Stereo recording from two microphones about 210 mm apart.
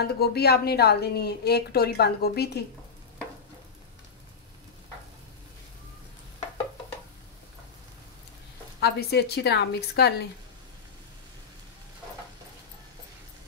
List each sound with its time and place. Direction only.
0.0 s a woman's voice: 50° left (ahead or behind)
8.8 s a woman's voice: 50° left (ahead or behind)